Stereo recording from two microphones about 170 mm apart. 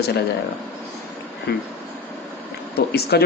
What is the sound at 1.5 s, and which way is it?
Speech, 70° left (ahead or behind).